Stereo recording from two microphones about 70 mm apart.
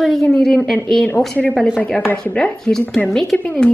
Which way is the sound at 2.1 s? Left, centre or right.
Centre.